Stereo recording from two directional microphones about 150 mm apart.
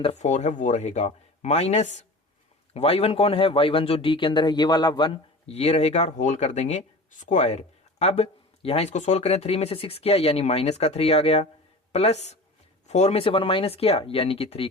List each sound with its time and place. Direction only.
0.0 s speech: 50° left (ahead or behind); by 5.2 s 30° left (ahead or behind)
5.5 s speech: 45° left (ahead or behind)